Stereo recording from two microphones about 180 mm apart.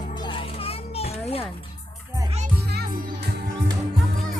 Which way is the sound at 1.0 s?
35° left (ahead or behind).